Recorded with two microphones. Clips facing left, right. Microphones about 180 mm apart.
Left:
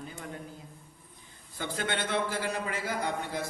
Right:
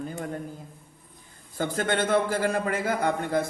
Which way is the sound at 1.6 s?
45° right (ahead or behind).